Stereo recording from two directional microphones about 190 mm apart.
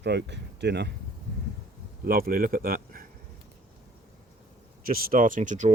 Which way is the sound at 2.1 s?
50° right (ahead or behind).